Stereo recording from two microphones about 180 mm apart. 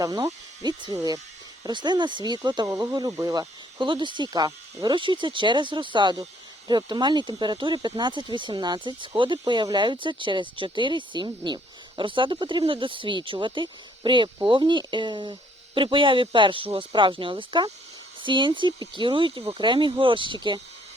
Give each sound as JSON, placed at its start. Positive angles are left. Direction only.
{"t": 0.0, "sound": "speech", "side_deg": -20}